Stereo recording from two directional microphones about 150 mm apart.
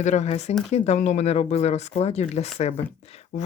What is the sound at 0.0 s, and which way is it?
Speech, 50° left (ahead or behind).